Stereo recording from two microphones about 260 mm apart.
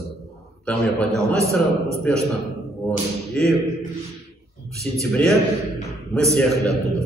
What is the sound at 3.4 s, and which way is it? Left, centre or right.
Speech, centre.